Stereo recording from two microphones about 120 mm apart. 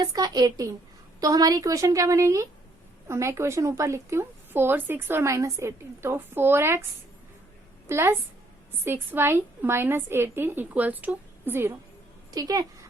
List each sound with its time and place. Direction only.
0.0 s speech: 30° right (ahead or behind)
7.9 s a woman's voice: 20° right (ahead or behind)
12.3 s speech: 30° right (ahead or behind)